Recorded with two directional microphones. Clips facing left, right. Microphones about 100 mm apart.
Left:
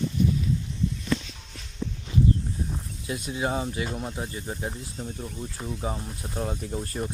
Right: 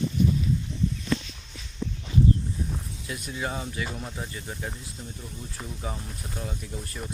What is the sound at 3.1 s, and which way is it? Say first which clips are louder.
Speech: left 4 dB; 25° left (ahead or behind).